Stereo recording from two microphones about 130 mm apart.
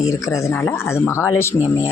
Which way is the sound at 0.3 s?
20° left (ahead or behind).